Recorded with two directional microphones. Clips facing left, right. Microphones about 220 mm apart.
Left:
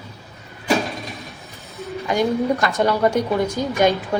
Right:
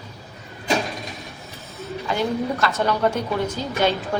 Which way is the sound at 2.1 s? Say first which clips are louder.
Left 4 dB; 15° left (ahead or behind).